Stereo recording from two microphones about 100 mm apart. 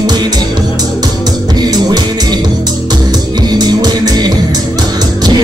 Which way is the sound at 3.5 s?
45° right (ahead or behind).